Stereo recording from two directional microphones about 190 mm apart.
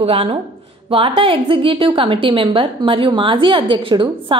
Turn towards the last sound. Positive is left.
turn(degrees=-25)  # may be behind; listen again after turning